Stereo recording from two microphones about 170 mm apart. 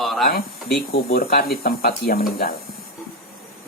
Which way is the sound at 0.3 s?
65° left (ahead or behind).